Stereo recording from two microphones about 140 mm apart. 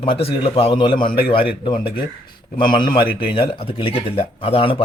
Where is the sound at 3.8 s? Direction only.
40° left (ahead or behind).